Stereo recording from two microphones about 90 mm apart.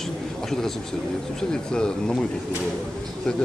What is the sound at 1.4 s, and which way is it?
Speech, 10° left (ahead or behind).